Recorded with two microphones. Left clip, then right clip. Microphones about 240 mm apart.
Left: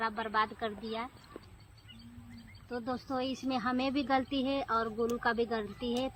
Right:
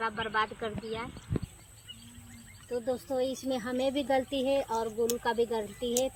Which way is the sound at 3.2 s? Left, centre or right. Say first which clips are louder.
Right 1 dB; centre.